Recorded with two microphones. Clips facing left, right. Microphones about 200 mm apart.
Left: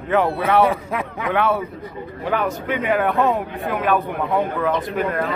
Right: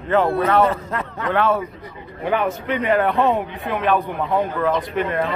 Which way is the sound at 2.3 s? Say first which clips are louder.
Right 1 dB; centre (ahead or behind).